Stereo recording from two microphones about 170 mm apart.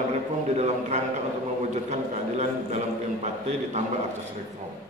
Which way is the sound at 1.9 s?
40° right (ahead or behind).